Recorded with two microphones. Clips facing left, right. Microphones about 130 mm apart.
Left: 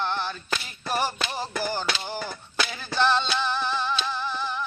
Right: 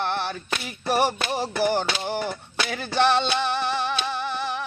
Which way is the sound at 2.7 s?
65° right (ahead or behind).